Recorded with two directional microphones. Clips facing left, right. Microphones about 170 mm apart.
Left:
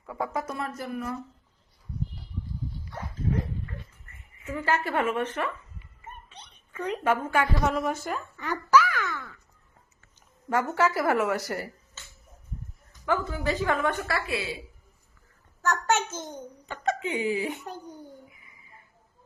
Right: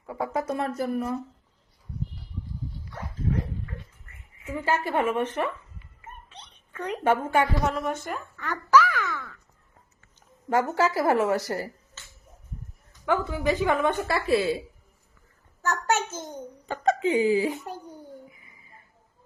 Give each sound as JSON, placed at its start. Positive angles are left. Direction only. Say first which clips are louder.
{"t": 0.0, "sound": "speech", "louder": "right 2 dB", "side_deg": -25}
{"t": 4.4, "sound": "a woman's voice", "louder": "right 1 dB", "side_deg": -15}
{"t": 6.2, "sound": "cat", "louder": "right 1 dB", "side_deg": 0}
{"t": 7.0, "sound": "speech", "louder": "right 3 dB", "side_deg": -25}
{"t": 7.6, "sound": "a child's voice", "louder": "left 1 dB", "side_deg": 0}
{"t": 10.5, "sound": "a woman's voice", "louder": "right 2 dB", "side_deg": -30}
{"t": 13.1, "sound": "a woman's voice", "louder": "right 3 dB", "side_deg": -15}
{"t": 14.3, "sound": "a woman's voice", "louder": "right 9 dB", "side_deg": -45}
{"t": 15.6, "sound": "a woman's voice", "louder": "even", "side_deg": -10}
{"t": 16.6, "sound": "a woman's voice", "louder": "right 6 dB", "side_deg": -35}